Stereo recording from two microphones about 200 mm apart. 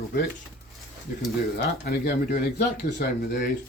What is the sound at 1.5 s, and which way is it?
Speech, 50° left (ahead or behind).